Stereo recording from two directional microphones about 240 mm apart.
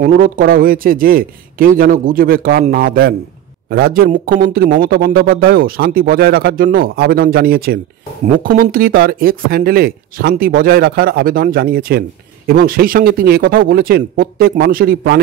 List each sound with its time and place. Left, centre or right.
0.0 s speech: right